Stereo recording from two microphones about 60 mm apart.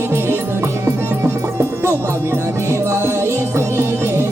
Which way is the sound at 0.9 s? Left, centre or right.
Right.